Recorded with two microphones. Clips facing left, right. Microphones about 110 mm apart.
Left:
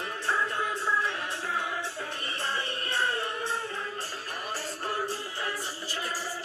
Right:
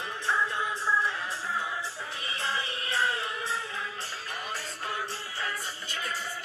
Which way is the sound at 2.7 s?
50° left (ahead or behind).